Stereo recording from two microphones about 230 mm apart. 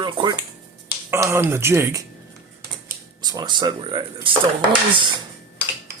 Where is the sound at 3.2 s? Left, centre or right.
Centre.